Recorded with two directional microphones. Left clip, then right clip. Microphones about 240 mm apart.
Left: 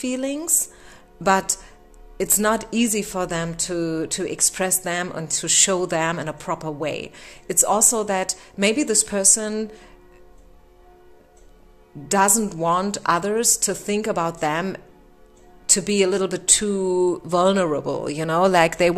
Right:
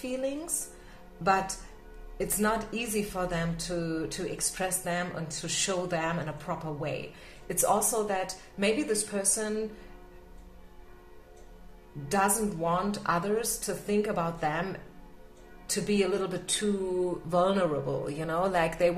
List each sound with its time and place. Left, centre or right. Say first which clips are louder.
0.0 s speech: left 7 dB; left
2.1 s speech: left 8 dB; left
12.1 s speech: left 8 dB; left